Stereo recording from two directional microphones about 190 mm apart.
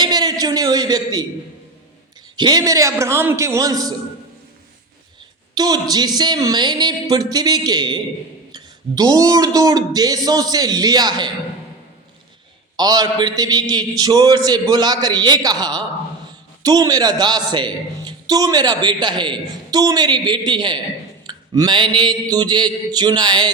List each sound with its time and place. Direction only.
0.0 s a sound: 20° right (ahead or behind)
2.3 s a man's voice: 20° right (ahead or behind)
5.5 s a man's voice: 20° right (ahead or behind)
12.7 s a man's voice: 20° right (ahead or behind)